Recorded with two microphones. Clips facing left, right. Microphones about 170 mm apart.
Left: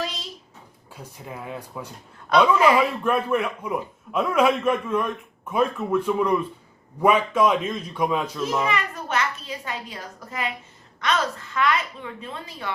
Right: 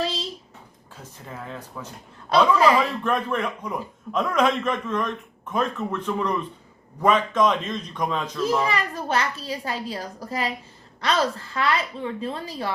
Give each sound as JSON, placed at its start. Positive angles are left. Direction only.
{"t": 0.0, "sound": "a sound", "side_deg": -30}
{"t": 0.9, "sound": "a man's voice", "side_deg": 10}
{"t": 2.3, "sound": "a child's voice", "side_deg": -30}
{"t": 2.6, "sound": "a man's voice", "side_deg": 10}
{"t": 8.4, "sound": "a child's voice", "side_deg": -35}